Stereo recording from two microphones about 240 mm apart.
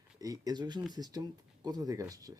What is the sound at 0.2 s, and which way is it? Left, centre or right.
Speech, centre.